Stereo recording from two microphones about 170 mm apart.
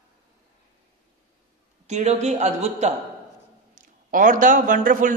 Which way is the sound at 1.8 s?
40° right (ahead or behind).